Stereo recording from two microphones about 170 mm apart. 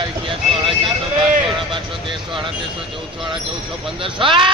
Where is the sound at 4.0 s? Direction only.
30° right (ahead or behind).